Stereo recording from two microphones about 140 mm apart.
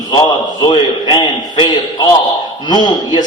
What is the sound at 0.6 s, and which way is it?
A man's voice, 30° left (ahead or behind).